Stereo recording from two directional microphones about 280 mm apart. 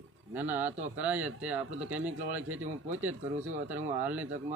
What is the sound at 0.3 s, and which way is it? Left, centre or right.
A man's voice, centre.